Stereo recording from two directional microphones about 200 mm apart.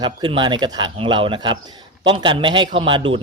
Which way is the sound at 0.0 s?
25° right (ahead or behind).